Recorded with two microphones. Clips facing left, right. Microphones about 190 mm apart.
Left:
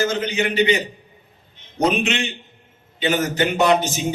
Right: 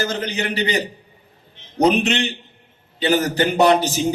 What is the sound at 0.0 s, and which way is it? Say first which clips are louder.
Speech: left 2 dB; 35° right (ahead or behind).